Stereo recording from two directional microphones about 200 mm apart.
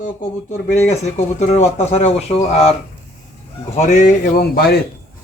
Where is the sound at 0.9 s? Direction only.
35° left (ahead or behind).